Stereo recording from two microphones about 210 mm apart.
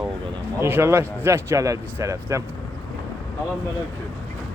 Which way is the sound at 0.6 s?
10° right (ahead or behind).